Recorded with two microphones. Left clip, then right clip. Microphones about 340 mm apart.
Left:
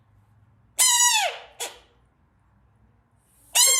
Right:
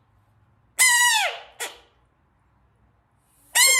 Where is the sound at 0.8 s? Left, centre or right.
Centre.